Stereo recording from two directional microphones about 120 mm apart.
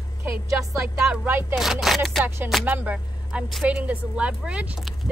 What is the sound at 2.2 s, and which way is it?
Speech, 15° right (ahead or behind).